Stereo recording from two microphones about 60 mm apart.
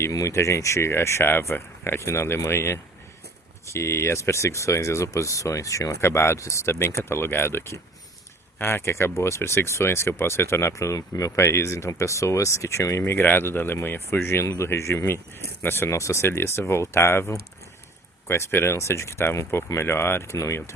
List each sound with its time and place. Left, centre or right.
0.1 s speech: left
13.1 s speech: left
14.4 s speech: left
15.9 s speech: left